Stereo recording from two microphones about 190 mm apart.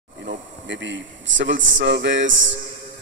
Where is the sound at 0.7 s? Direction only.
75° right (ahead or behind).